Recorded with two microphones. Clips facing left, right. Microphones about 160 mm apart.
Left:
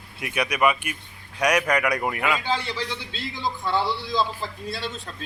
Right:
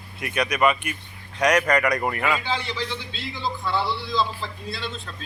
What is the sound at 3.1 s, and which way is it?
Speech, 45° left (ahead or behind).